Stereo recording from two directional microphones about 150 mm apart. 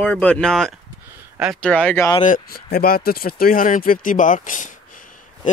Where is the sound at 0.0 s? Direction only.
10° left (ahead or behind).